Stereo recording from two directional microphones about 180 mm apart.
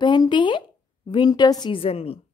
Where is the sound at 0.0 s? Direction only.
25° left (ahead or behind).